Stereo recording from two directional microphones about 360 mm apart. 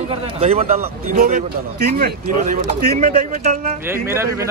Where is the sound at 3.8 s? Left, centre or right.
Centre.